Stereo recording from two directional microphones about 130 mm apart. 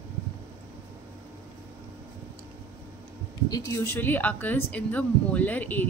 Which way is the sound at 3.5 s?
25° left (ahead or behind).